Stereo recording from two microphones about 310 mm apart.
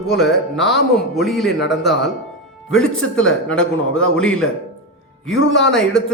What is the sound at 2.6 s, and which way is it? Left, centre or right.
A man's voice, centre.